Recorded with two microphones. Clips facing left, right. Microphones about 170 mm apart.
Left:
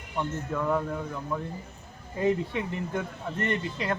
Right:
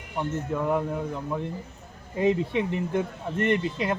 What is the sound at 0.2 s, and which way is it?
Speech, 15° right (ahead or behind).